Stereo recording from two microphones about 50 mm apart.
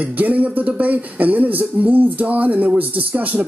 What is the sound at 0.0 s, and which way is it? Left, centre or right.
Speech, right.